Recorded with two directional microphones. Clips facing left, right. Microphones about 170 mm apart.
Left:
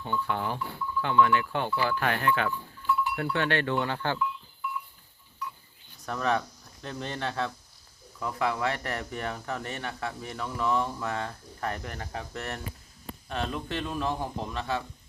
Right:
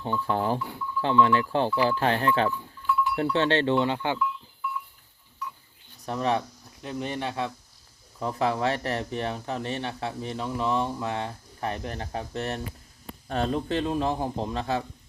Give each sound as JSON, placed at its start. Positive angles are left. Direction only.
{"t": 0.0, "sound": "a man's voice", "side_deg": -35}
{"t": 6.1, "sound": "speech", "side_deg": -20}
{"t": 8.2, "sound": "speech", "side_deg": -30}
{"t": 13.2, "sound": "a man's voice", "side_deg": -40}